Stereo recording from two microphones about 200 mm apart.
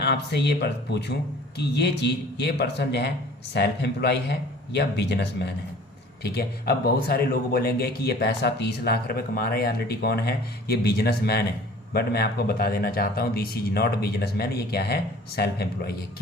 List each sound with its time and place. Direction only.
0.0 s speech: 55° left (ahead or behind)